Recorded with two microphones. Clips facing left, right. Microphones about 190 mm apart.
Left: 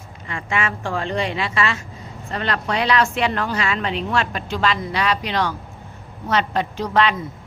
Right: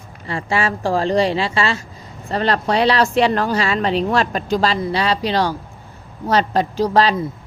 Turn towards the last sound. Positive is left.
turn(degrees=-35)  # may be behind; listen again after turning